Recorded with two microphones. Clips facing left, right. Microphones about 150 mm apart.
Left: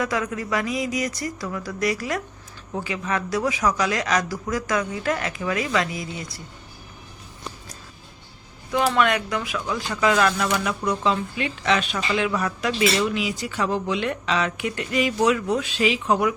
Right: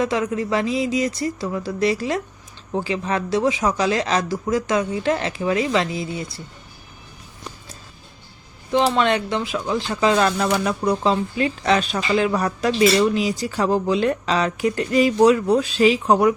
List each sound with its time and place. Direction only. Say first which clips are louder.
0.0 s speech: right 4 dB; 25° right (ahead or behind)
8.9 s speech: right 2 dB; 30° right (ahead or behind)